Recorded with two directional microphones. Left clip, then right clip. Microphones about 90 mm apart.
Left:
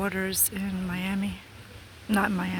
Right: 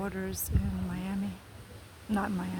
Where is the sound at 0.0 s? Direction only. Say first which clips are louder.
Left 7 dB; 50° left (ahead or behind).